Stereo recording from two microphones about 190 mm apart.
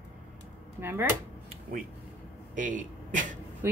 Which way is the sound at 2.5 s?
45° right (ahead or behind).